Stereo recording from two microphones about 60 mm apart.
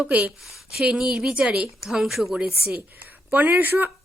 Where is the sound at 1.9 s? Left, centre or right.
Centre.